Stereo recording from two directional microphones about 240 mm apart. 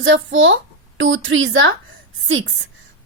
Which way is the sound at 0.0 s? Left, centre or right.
Right.